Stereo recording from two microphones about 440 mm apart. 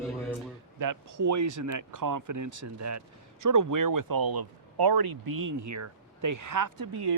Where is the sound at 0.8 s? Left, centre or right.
Right.